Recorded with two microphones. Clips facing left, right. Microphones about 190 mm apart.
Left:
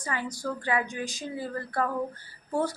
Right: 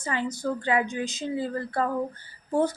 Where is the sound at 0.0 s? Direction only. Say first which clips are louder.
Right 4 dB; 25° right (ahead or behind).